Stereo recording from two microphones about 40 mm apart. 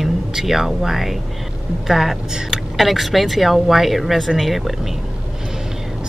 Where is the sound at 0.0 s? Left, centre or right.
Centre.